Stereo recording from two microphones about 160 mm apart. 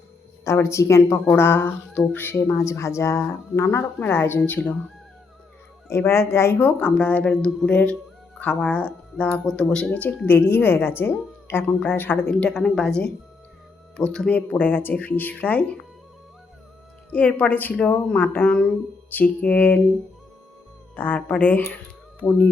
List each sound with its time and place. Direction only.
0.4 s speech: 15° left (ahead or behind)
5.9 s speech: 15° left (ahead or behind)
17.1 s speech: 10° left (ahead or behind)
20.9 s speech: 10° left (ahead or behind)